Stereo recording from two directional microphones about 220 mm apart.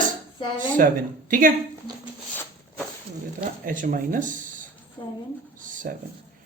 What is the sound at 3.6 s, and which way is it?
Speech, 35° right (ahead or behind).